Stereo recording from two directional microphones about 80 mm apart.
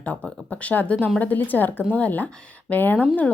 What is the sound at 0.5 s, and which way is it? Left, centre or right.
A woman's voice, centre.